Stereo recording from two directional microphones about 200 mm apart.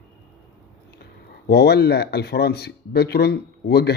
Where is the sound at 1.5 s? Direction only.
55° left (ahead or behind).